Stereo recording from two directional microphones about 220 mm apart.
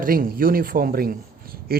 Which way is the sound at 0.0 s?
40° right (ahead or behind).